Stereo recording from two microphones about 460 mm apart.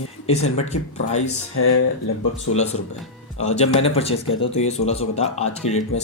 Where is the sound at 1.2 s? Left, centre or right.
Left.